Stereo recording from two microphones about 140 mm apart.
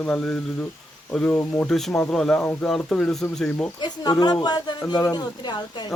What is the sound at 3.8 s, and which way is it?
Speech, 30° left (ahead or behind).